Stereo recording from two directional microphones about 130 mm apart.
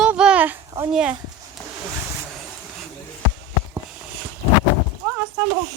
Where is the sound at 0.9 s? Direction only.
5° right (ahead or behind).